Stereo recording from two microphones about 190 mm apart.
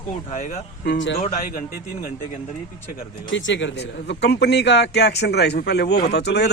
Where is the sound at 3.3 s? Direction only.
75° left (ahead or behind).